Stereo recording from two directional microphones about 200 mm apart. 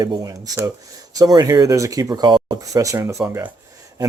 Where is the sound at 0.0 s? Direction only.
20° right (ahead or behind).